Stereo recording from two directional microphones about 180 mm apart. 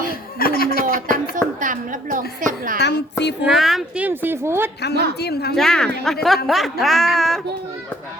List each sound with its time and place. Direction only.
0.1 s a sound: 55° left (ahead or behind)
0.9 s speech: 45° right (ahead or behind)
2.8 s a woman's voice: 70° left (ahead or behind)
3.4 s speech: centre (ahead or behind)
5.2 s a woman's voice: 60° left (ahead or behind)
5.5 s a woman's voice: 5° left (ahead or behind)